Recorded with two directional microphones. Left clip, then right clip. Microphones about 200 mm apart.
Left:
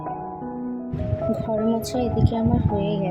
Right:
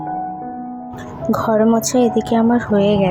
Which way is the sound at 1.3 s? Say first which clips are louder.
Right 11 dB; 30° right (ahead or behind).